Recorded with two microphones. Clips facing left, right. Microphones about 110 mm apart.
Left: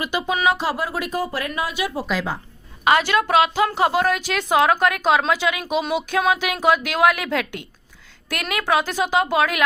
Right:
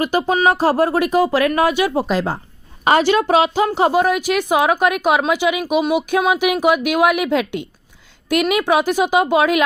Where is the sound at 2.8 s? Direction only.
30° right (ahead or behind).